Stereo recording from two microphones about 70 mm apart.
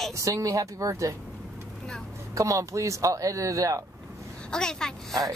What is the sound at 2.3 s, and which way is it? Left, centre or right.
Speech, right.